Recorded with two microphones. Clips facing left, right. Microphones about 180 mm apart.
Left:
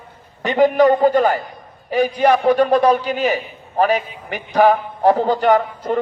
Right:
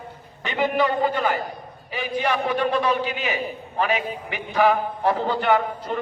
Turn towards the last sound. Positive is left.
turn(degrees=45)  # may be behind; listen again after turning